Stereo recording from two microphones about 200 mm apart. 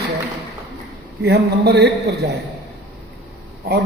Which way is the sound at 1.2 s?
55° right (ahead or behind).